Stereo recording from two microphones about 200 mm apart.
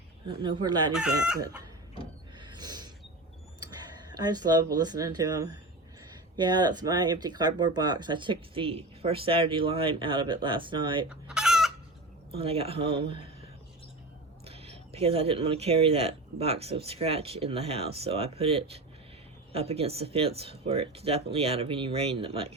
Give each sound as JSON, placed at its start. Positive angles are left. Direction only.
{"t": 0.6, "sound": "speech", "side_deg": -20}
{"t": 0.9, "sound": "chicken", "side_deg": -5}
{"t": 2.4, "sound": "a sound", "side_deg": -20}
{"t": 3.6, "sound": "speech", "side_deg": -20}
{"t": 11.1, "sound": "chicken", "side_deg": -5}
{"t": 12.3, "sound": "speech", "side_deg": -30}
{"t": 14.4, "sound": "speech", "side_deg": -30}